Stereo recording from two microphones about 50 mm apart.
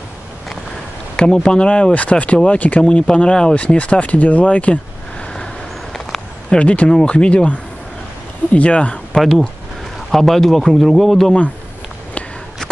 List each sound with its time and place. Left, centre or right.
1.1 s speech: centre
2.8 s speech: centre
6.6 s speech: left
8.5 s speech: left
10.1 s a man's voice: centre